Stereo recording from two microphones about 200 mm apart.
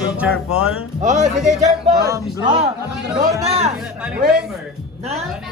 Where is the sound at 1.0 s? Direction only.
35° right (ahead or behind).